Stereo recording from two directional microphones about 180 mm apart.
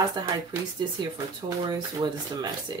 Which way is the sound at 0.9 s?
25° right (ahead or behind).